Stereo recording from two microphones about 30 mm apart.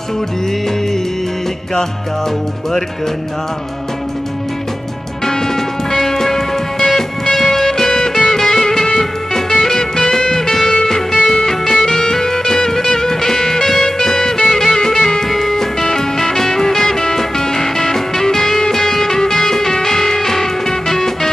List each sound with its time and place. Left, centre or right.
5.2 s music: centre